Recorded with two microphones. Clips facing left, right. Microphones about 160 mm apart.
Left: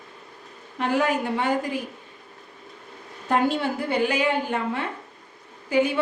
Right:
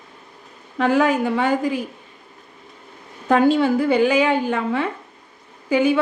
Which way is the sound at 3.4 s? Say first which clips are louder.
Right 8 dB; 90° right.